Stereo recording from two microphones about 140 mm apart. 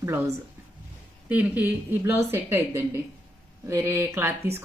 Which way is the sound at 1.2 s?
10° right (ahead or behind).